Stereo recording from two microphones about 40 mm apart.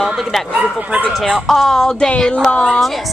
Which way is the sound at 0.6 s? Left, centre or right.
Right.